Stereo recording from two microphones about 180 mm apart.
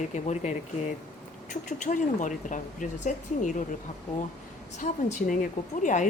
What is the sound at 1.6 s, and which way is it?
Speech, 45° left (ahead or behind).